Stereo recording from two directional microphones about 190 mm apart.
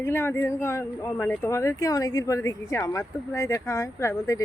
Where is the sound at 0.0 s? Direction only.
10° left (ahead or behind).